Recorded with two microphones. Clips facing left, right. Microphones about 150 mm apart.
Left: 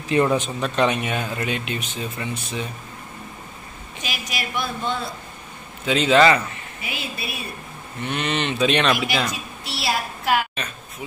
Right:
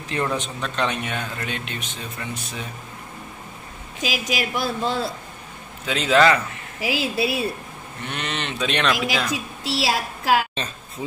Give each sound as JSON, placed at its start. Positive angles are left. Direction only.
{"t": 0.1, "sound": "speech", "side_deg": 10}
{"t": 4.0, "sound": "speech", "side_deg": -90}
{"t": 4.6, "sound": "a man's voice", "side_deg": -35}
{"t": 5.9, "sound": "speech", "side_deg": 0}
{"t": 6.8, "sound": "speech", "side_deg": -90}
{"t": 8.1, "sound": "speech", "side_deg": 0}
{"t": 8.9, "sound": "a woman's voice", "side_deg": -90}